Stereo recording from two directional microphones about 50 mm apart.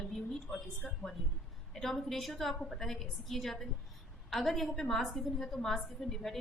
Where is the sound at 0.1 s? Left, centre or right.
Centre.